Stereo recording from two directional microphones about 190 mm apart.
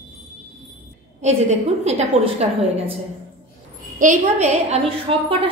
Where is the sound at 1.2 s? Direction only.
35° right (ahead or behind).